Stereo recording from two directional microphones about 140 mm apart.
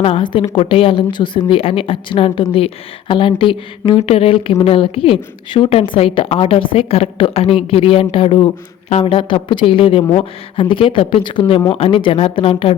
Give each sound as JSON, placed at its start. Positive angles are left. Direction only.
{"t": 0.0, "sound": "a woman's voice", "side_deg": 40}